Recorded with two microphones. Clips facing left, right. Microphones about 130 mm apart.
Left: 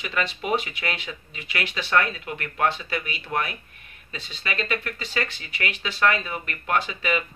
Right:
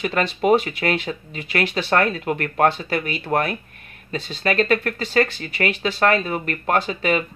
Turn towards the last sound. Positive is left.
turn(degrees=-40)  # may be behind; listen again after turning